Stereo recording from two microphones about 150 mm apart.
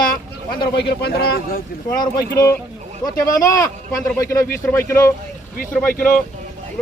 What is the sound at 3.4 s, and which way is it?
Speech, 25° left (ahead or behind).